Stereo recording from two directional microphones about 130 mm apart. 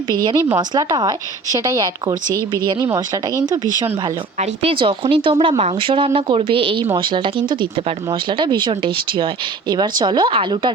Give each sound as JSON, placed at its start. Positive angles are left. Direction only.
{"t": 0.3, "sound": "a woman's voice", "side_deg": -35}
{"t": 4.4, "sound": "speech", "side_deg": -45}